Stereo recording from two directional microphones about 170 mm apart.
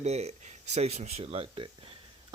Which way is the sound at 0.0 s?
40° right (ahead or behind).